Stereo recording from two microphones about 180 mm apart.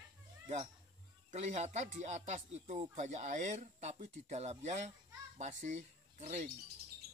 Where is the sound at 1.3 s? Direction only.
40° right (ahead or behind).